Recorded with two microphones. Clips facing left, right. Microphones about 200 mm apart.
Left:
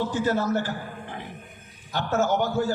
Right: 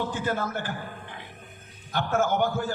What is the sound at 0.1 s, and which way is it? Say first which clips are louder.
Speech: left 5 dB; 55° right (ahead or behind).